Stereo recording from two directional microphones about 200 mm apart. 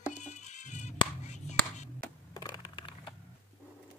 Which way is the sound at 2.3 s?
20° left (ahead or behind).